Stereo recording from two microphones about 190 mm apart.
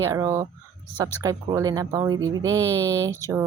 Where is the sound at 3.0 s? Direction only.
15° left (ahead or behind).